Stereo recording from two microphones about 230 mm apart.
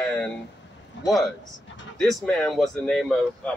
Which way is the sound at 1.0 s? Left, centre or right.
Left.